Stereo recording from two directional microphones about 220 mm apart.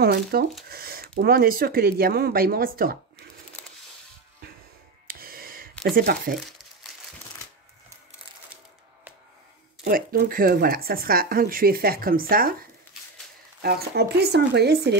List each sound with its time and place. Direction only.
0.0 s speech: 45° right (ahead or behind)
5.2 s a sound: 40° right (ahead or behind)
9.8 s speech: 40° right (ahead or behind)
13.6 s speech: 45° right (ahead or behind)